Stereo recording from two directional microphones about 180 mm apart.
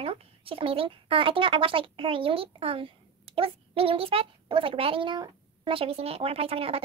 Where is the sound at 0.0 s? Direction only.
30° right (ahead or behind).